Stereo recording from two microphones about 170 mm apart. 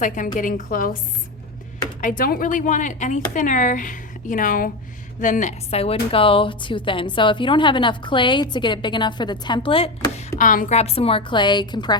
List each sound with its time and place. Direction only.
0.3 s speech: 50° left (ahead or behind)
2.0 s a woman's voice: 55° left (ahead or behind); by 10.2 s 35° left (ahead or behind)
10.3 s speech: 50° left (ahead or behind)
10.8 s a woman's voice: 35° left (ahead or behind)